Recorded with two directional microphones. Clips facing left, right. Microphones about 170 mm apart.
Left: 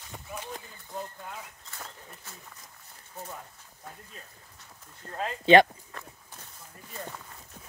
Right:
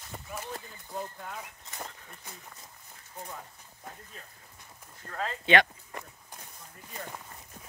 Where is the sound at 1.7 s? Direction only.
15° right (ahead or behind).